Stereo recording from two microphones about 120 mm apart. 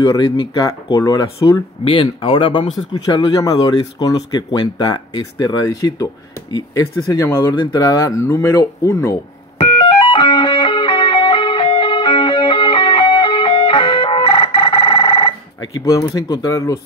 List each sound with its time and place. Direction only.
0.0 s speech: 30° left (ahead or behind)
1.9 s speech: 45° left (ahead or behind); by 9.1 s 25° left (ahead or behind)
9.6 s music: 50° left (ahead or behind)
15.8 s speech: 25° left (ahead or behind)